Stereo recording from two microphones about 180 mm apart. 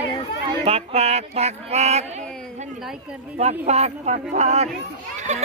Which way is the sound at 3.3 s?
35° right (ahead or behind).